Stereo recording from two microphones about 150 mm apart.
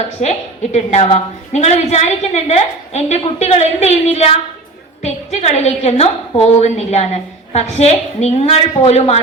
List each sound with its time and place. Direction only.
0.2 s a woman's voice: 45° left (ahead or behind)